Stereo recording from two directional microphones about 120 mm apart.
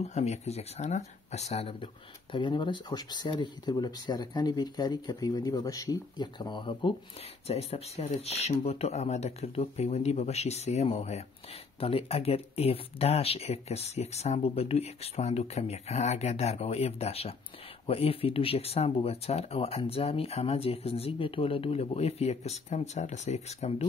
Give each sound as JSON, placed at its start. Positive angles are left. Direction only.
{"t": 0.0, "sound": "speech", "side_deg": 65}
{"t": 2.3, "sound": "speech", "side_deg": 40}
{"t": 7.4, "sound": "speech", "side_deg": 60}